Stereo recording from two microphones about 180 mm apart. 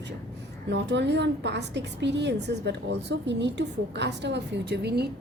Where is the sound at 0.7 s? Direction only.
75° right (ahead or behind).